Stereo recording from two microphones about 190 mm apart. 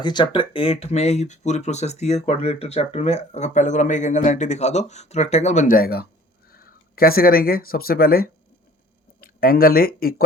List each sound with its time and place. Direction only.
0.0 s speech: 25° left (ahead or behind); by 10.2 s 50° left (ahead or behind)